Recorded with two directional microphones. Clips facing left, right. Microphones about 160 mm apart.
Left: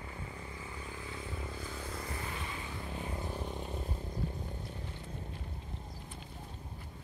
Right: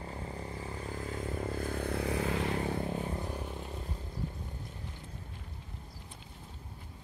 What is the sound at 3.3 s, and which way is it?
Vehicle, 10° right (ahead or behind).